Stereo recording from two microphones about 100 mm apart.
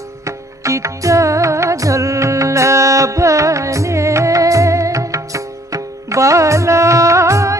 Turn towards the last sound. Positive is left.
turn(degrees=-30)  # may be behind; listen again after turning